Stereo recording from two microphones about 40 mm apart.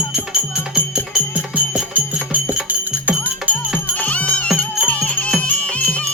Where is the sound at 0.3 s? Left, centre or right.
Right.